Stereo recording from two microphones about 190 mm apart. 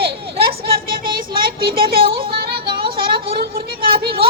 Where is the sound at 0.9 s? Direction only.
25° right (ahead or behind).